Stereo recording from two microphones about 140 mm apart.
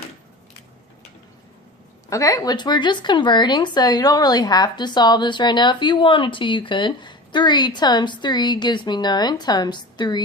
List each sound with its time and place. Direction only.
2.0 s speech: 25° left (ahead or behind)